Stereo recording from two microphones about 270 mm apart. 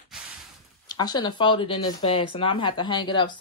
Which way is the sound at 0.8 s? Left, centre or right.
Centre.